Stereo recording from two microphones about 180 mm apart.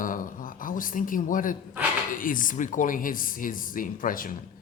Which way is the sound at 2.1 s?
50° left (ahead or behind).